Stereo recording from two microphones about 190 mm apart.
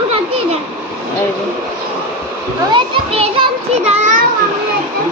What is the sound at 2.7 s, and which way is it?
A child's voice, 30° right (ahead or behind).